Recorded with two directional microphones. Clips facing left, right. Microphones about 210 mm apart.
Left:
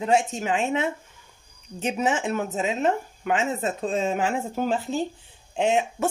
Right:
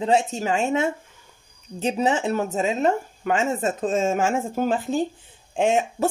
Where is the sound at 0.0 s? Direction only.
35° right (ahead or behind).